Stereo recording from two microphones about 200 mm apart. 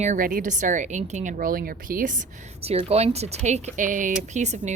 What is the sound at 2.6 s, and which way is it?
A woman's voice, 30° right (ahead or behind).